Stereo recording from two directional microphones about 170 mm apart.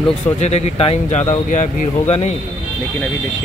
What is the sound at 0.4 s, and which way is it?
Speech, 40° left (ahead or behind).